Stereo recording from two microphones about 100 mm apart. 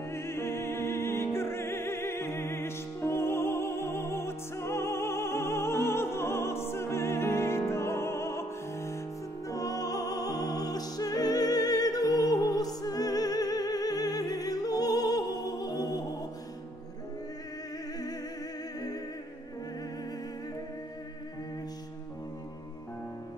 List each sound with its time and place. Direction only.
0.1 s music: 25° left (ahead or behind)